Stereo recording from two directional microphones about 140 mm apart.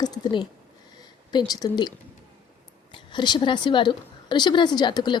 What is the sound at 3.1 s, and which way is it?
A woman's voice, 35° left (ahead or behind).